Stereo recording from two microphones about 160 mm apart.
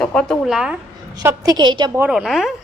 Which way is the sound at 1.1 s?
20° right (ahead or behind).